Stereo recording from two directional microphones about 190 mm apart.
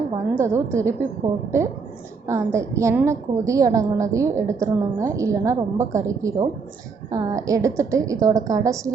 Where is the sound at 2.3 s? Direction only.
15° right (ahead or behind).